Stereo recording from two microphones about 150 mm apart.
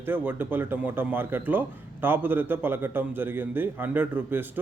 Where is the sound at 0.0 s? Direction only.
15° right (ahead or behind).